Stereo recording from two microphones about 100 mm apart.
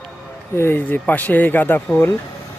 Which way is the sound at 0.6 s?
20° left (ahead or behind).